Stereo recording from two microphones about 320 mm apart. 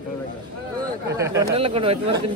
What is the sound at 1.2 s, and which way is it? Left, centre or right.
Speech, centre.